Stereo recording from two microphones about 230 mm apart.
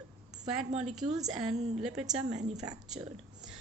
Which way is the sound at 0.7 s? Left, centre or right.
Right.